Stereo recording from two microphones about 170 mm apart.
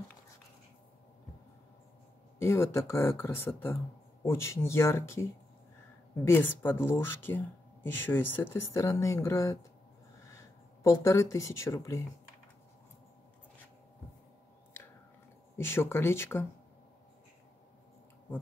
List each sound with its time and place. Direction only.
2.3 s speech: 15° left (ahead or behind)
10.8 s speech: 15° left (ahead or behind)
15.5 s speech: 15° left (ahead or behind)